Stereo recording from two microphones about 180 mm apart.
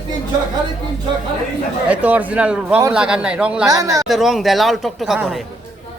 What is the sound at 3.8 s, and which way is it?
Speech, 20° right (ahead or behind).